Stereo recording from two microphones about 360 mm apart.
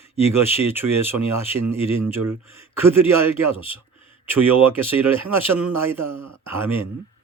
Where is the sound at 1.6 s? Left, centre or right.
Right.